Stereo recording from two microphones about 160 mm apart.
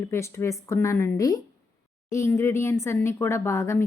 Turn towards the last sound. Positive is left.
turn(degrees=15)  # may be behind; listen again after turning